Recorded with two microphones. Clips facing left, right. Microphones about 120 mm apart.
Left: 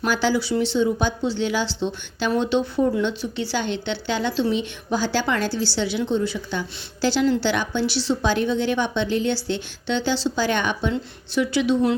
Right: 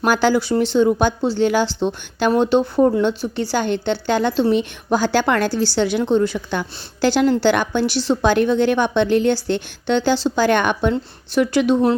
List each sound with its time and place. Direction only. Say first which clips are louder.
0.0 s speech: right 5 dB; 50° right (ahead or behind)